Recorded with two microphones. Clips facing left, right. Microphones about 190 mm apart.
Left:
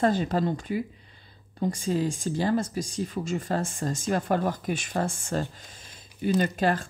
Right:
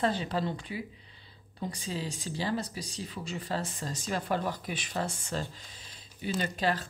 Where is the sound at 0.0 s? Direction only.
45° left (ahead or behind).